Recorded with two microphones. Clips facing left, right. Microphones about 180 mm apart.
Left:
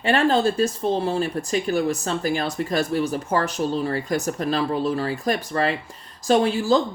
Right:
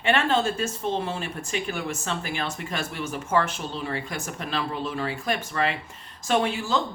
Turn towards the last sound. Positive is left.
turn(degrees=35)  # may be behind; listen again after turning